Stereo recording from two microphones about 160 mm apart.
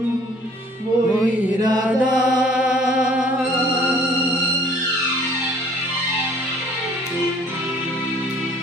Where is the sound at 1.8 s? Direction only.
10° right (ahead or behind).